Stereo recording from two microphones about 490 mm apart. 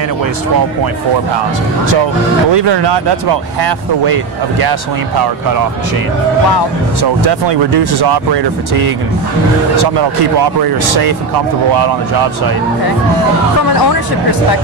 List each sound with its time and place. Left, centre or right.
2.5 s speech: right
7.0 s speech: right
10.6 s speech: right